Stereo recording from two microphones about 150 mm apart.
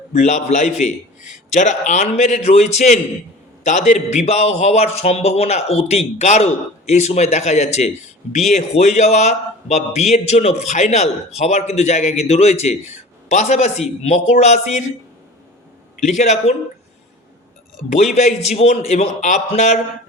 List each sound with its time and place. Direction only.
0.1 s speech: 50° left (ahead or behind)
16.0 s speech: 50° left (ahead or behind)
18.0 s speech: 50° left (ahead or behind)